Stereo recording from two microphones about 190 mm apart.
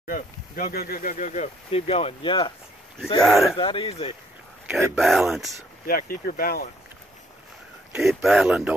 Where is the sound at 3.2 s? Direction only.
Centre (ahead or behind).